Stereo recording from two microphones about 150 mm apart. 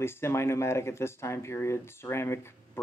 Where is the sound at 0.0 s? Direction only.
15° left (ahead or behind).